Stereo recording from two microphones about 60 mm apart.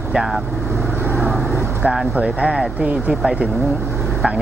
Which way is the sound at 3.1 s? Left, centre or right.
Centre.